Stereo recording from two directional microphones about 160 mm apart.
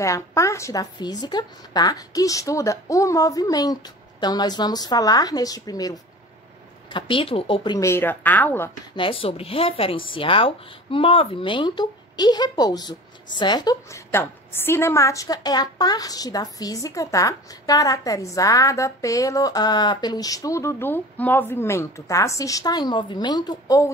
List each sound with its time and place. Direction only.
0.0 s speech: 20° left (ahead or behind)
8.9 s speech: 35° left (ahead or behind)